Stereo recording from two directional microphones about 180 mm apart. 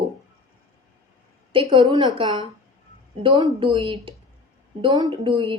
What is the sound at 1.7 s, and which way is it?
Speech, 25° right (ahead or behind).